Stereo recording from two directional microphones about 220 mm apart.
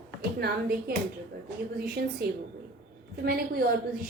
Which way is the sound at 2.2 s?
45° right (ahead or behind).